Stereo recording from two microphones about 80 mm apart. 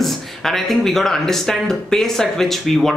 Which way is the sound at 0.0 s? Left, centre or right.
Centre.